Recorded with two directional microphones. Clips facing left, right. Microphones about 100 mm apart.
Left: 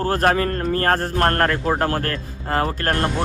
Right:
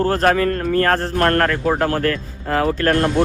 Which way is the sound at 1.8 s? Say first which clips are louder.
Right 3 dB; 40° left (ahead or behind).